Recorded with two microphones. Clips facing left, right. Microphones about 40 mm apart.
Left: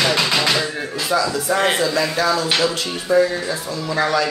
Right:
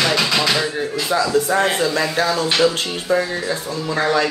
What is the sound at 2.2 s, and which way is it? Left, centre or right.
Speech, right.